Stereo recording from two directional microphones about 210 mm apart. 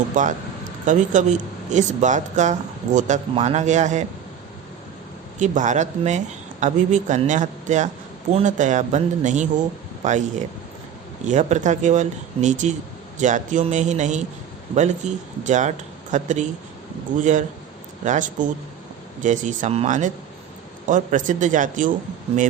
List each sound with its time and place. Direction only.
0.1 s speech: 35° right (ahead or behind)
5.4 s speech: 35° right (ahead or behind)